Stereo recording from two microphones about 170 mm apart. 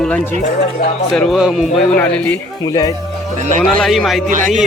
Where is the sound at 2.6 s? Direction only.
20° left (ahead or behind).